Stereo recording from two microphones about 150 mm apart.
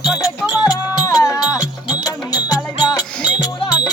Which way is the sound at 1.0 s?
20° left (ahead or behind).